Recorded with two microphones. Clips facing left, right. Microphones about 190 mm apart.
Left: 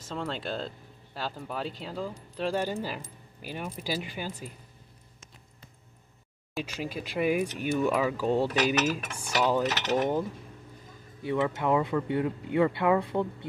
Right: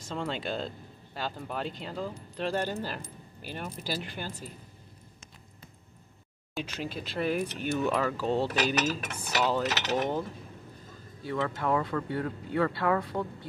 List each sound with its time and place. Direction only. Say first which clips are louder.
0.0 s speech: even; centre (ahead or behind)
6.5 s speech: left 1 dB; 10° left (ahead or behind)
11.2 s speech: left 3 dB; 15° left (ahead or behind)